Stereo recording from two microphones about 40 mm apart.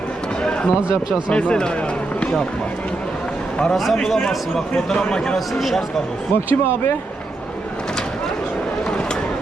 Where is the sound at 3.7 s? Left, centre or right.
Centre.